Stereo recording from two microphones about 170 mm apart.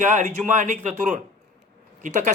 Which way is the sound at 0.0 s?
50° right (ahead or behind).